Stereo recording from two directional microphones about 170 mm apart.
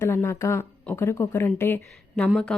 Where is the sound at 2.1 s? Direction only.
5° left (ahead or behind).